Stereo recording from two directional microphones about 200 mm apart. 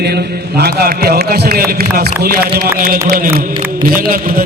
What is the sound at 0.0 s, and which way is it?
Chant, 55° right (ahead or behind).